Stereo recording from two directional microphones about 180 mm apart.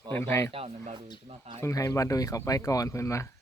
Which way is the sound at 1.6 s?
15° left (ahead or behind).